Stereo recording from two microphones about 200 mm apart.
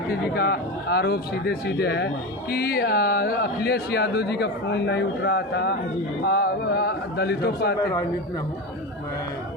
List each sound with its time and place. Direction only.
0.1 s speech: 55° left (ahead or behind)